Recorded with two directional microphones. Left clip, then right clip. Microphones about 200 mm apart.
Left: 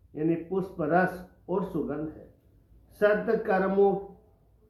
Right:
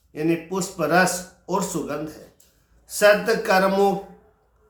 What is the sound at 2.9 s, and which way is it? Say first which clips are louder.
Speech: right 7 dB; 20° right (ahead or behind).